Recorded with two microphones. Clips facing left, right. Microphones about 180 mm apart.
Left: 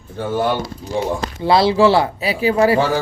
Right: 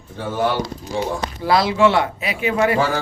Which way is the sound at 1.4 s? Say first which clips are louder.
Left 3 dB; 30° left (ahead or behind).